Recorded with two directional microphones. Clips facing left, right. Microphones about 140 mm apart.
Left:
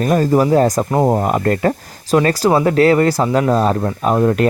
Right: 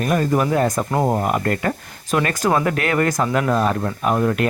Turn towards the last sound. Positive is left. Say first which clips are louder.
# left 5 dB
turn(degrees=30)  # may be behind; listen again after turning